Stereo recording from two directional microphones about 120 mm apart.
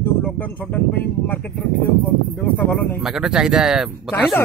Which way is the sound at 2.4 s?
15° left (ahead or behind).